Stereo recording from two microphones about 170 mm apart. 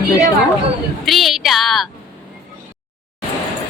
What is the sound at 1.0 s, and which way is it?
Speech, centre (ahead or behind).